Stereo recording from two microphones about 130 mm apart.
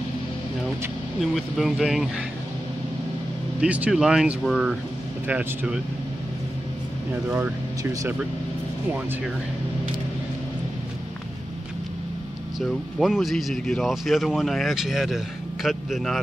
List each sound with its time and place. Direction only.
1.2 s speech: centre (ahead or behind)
3.6 s speech: 10° right (ahead or behind)
5.2 s speech: 15° right (ahead or behind)
7.2 s speech: 15° right (ahead or behind)
12.5 s speech: centre (ahead or behind)